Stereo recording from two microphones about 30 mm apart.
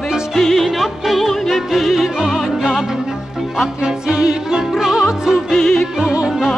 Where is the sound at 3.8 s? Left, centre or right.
Right.